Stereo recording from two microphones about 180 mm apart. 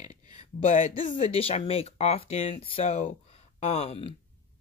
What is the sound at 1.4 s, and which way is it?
Speech, 35° left (ahead or behind).